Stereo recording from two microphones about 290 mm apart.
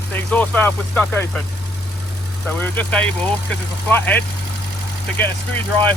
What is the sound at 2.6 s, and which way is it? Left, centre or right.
Speech, centre.